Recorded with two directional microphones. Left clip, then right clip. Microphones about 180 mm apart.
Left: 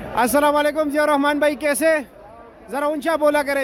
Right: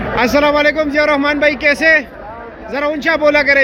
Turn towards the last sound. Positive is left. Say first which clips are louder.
# right 7 dB
turn(degrees=30)  # may be behind; listen again after turning